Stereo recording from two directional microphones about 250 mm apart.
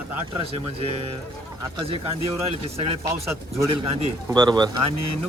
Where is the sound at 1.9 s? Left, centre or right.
Right.